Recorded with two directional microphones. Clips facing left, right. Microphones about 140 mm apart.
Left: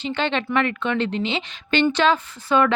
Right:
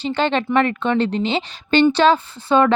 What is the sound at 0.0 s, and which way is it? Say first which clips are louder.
A woman's voice: right 4 dB; 35° right (ahead or behind).